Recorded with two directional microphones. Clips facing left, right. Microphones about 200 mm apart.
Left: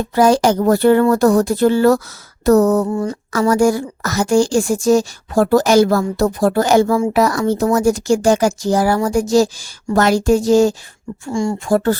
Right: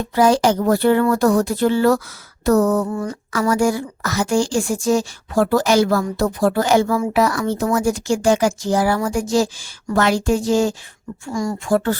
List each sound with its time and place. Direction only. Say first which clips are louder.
0.1 s a woman's voice: left 2 dB; 45° left (ahead or behind)
2.4 s a sound: left 4 dB; 40° left (ahead or behind)
2.9 s speech: left 4 dB; 25° left (ahead or behind)
3.5 s a woman's voice: left 4 dB; 40° left (ahead or behind)
11.3 s speech: left 4 dB; 25° left (ahead or behind)
11.6 s speech: left 2 dB; 40° left (ahead or behind)